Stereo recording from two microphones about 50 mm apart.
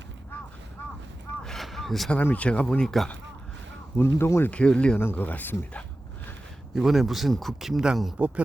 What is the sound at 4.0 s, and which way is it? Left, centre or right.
Speech, left.